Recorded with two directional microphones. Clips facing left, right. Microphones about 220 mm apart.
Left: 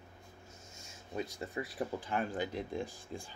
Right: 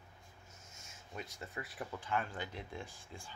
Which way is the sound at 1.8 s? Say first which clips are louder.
Left 3 dB; 35° left (ahead or behind).